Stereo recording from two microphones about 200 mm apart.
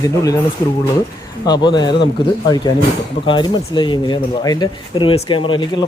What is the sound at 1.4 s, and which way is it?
Speech, 20° left (ahead or behind).